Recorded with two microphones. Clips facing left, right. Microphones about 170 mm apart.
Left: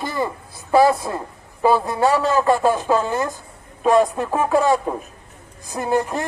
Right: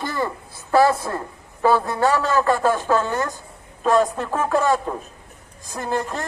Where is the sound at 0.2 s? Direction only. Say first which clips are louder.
Left 1 dB; 20° left (ahead or behind).